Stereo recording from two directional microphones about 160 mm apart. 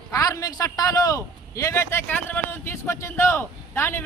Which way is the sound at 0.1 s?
20° left (ahead or behind).